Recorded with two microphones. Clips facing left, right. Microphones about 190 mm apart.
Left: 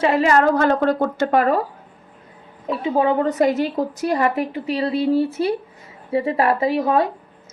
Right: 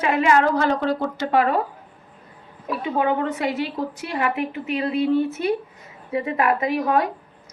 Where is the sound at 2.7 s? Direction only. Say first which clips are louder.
Left 3 dB; 30° left (ahead or behind).